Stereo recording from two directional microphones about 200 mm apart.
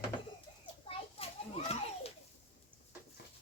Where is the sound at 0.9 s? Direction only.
30° left (ahead or behind).